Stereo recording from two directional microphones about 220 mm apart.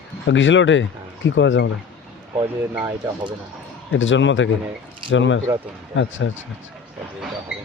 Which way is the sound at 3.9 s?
55° left (ahead or behind).